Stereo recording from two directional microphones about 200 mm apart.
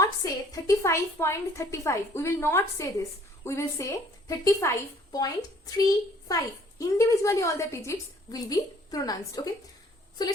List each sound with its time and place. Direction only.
0.0 s a woman's voice: 15° left (ahead or behind)